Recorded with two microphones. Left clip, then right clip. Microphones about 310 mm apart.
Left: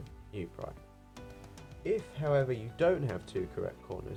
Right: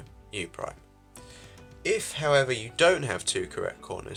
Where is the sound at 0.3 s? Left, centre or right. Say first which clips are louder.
Right 8 dB; right.